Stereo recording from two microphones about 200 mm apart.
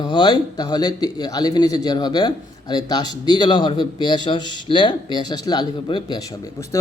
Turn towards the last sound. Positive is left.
turn(degrees=15)  # may be behind; listen again after turning